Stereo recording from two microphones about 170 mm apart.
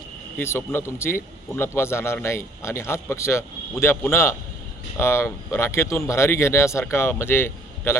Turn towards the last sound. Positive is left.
turn(degrees=15)  # may be behind; listen again after turning